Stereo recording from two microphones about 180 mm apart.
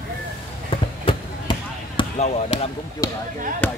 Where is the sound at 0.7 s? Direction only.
30° left (ahead or behind).